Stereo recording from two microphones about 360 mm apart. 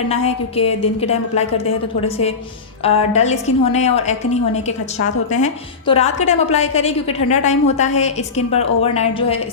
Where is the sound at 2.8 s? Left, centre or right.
Centre.